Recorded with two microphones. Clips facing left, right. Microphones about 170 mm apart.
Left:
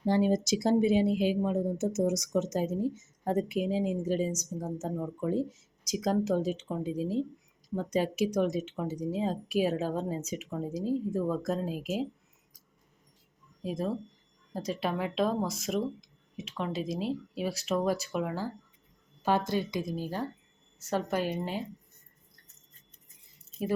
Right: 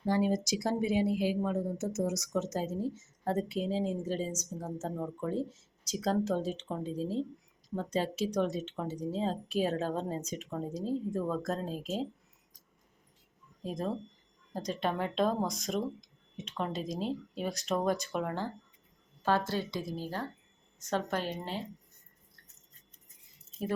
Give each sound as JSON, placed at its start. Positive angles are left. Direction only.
{"t": 0.0, "sound": "speech", "side_deg": 25}
{"t": 13.6, "sound": "speech", "side_deg": 5}